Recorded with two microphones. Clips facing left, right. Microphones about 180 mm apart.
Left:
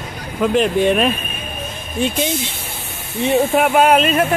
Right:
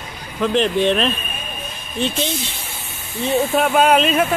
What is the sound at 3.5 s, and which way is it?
Speech, 10° left (ahead or behind).